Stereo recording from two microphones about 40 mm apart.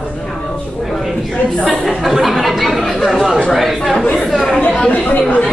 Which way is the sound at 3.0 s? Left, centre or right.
Centre.